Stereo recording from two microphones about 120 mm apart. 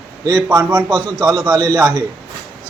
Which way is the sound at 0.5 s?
35° right (ahead or behind).